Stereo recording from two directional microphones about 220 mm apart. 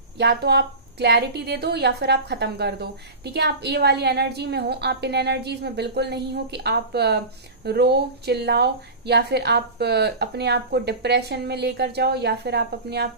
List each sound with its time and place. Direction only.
0.2 s a woman's voice: 50° right (ahead or behind)